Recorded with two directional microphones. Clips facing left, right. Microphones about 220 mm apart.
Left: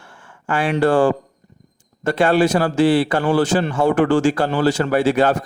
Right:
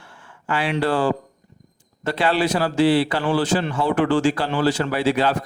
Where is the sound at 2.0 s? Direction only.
45° left (ahead or behind).